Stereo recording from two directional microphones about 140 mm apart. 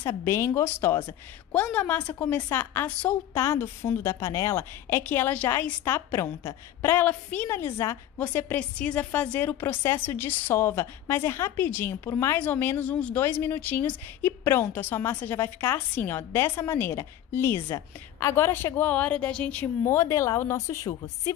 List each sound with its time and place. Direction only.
0.0 s a woman's voice: 20° left (ahead or behind)
20.0 s speech: 20° left (ahead or behind)